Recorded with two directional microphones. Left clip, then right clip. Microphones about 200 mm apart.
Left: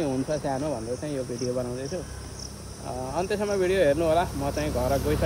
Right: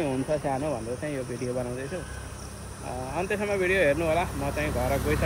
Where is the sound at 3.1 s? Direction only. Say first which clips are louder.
Left 1 dB; 15° left (ahead or behind).